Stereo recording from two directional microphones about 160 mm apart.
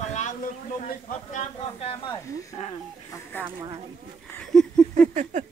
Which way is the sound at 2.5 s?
40° left (ahead or behind).